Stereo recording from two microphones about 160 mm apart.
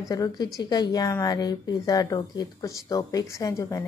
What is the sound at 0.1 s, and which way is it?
A woman's voice, 25° left (ahead or behind).